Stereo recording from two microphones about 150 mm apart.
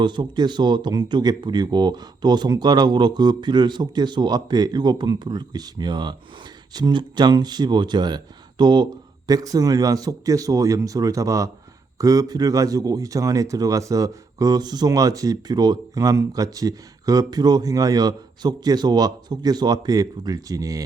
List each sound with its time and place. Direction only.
0.0 s speech: 30° right (ahead or behind)